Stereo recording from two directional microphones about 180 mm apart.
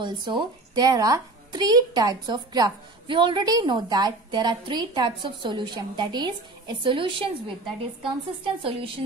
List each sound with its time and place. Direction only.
0.0 s speech: 25° right (ahead or behind)
8.6 s a woman's voice: 30° right (ahead or behind)